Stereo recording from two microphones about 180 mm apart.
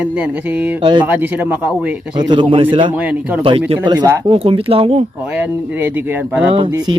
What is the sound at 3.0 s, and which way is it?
Speech, 10° right (ahead or behind).